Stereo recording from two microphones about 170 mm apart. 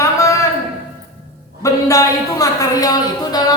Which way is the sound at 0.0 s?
20° left (ahead or behind).